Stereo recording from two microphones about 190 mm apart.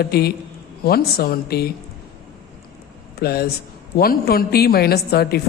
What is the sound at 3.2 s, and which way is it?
A woman's voice, 55° left (ahead or behind).